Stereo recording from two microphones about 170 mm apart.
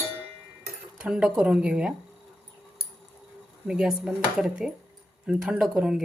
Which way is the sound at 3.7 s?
5° right (ahead or behind).